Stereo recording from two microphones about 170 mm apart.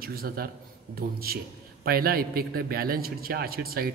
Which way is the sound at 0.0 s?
60° right (ahead or behind).